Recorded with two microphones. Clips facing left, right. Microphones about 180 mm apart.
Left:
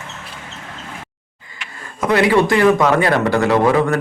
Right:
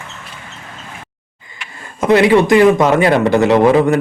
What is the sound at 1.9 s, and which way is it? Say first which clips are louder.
A man's voice: right 4 dB; 25° right (ahead or behind).